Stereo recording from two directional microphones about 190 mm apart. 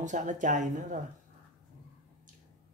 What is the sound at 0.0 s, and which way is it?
Speech, 40° right (ahead or behind).